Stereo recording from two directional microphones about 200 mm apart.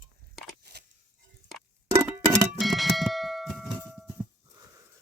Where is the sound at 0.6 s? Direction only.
55° right (ahead or behind).